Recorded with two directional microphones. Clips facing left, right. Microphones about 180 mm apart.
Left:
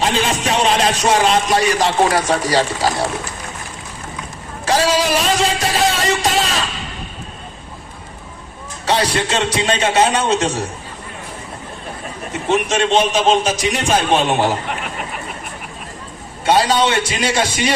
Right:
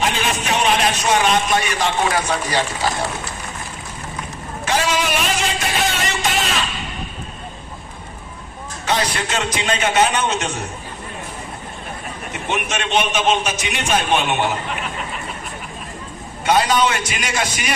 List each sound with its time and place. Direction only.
0.0 s speech: 30° left (ahead or behind)
4.6 s speech: 35° left (ahead or behind)
8.9 s speech: 30° left (ahead or behind)
12.3 s speech: 35° left (ahead or behind)
16.5 s speech: 30° left (ahead or behind)